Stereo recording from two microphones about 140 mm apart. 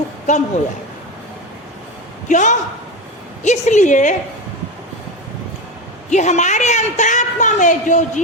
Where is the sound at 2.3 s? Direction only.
60° left (ahead or behind).